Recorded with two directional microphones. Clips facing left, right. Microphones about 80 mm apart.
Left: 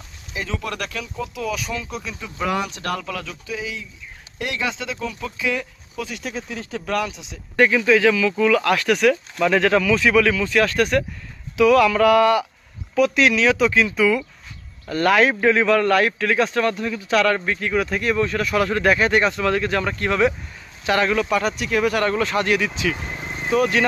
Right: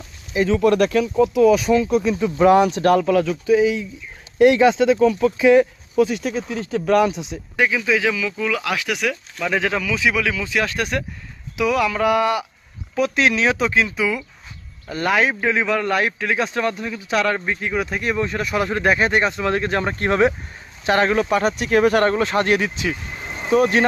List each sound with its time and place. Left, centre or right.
0.3 s speech: right
6.1 s speech: centre
7.0 s a man's voice: centre
13.0 s a man's voice: right